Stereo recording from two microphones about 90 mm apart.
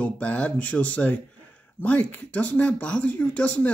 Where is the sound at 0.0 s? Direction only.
15° left (ahead or behind).